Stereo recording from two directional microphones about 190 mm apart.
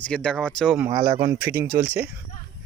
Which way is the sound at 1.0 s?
15° right (ahead or behind).